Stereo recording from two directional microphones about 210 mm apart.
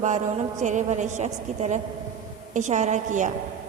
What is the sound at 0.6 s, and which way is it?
A woman's voice, 35° right (ahead or behind).